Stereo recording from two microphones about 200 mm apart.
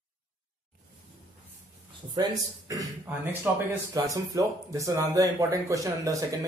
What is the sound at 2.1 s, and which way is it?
Speech, 20° right (ahead or behind).